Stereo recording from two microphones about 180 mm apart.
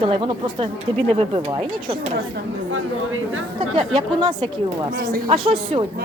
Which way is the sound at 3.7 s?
30° right (ahead or behind).